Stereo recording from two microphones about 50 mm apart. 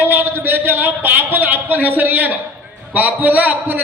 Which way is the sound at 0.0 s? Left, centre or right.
Right.